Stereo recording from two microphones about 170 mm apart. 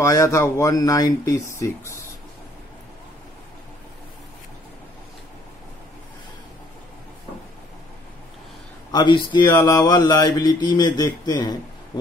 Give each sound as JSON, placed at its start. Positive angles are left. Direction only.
{"t": 0.0, "sound": "speech", "side_deg": 20}
{"t": 8.9, "sound": "speech", "side_deg": 30}